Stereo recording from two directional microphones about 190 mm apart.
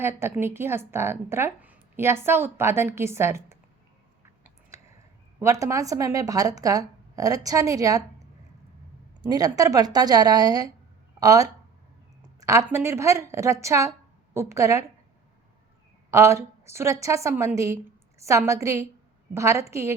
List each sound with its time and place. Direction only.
0.0 s a woman's voice: 10° right (ahead or behind)
4.7 s a sound: 15° right (ahead or behind)
5.4 s a woman's voice: 15° right (ahead or behind)
9.3 s a woman's voice: 20° right (ahead or behind)
16.1 s a woman's voice: 15° right (ahead or behind)